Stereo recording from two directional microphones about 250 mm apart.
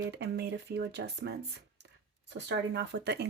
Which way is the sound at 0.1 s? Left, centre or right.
Right.